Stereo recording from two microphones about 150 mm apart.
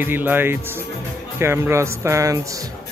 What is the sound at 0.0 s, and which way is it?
Speech, 15° right (ahead or behind).